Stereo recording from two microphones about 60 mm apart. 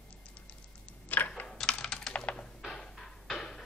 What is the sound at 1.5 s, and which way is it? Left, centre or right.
Typing, centre.